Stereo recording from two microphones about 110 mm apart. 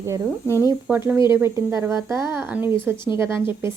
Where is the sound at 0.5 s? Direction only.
25° right (ahead or behind).